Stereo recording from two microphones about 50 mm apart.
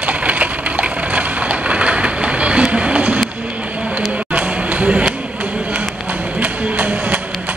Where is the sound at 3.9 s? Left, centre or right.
Right.